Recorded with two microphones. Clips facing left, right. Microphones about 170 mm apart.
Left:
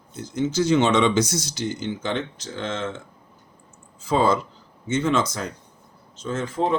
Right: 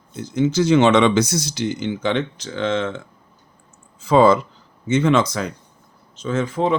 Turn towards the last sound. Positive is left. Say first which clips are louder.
# right 4 dB
turn(degrees=-80)